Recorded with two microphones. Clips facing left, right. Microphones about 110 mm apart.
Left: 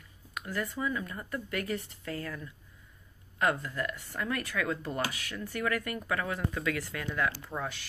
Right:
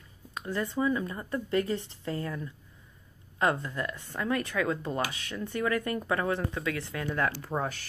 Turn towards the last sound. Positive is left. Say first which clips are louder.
# right 5 dB
turn(degrees=-45)  # may be behind; listen again after turning